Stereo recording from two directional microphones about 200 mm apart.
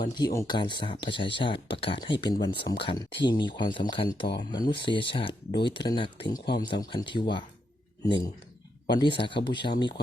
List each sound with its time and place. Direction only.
0.0 s speech: 20° left (ahead or behind)